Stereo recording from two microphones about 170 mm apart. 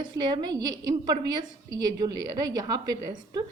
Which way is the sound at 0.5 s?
25° right (ahead or behind).